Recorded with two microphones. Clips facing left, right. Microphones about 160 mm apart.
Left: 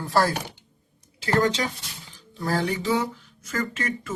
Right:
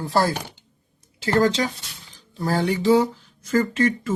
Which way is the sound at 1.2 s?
30° right (ahead or behind).